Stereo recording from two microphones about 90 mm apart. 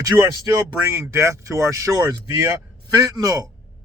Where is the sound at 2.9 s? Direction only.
45° right (ahead or behind).